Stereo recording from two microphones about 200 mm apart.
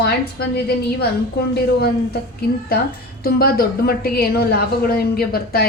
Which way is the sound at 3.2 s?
50° left (ahead or behind).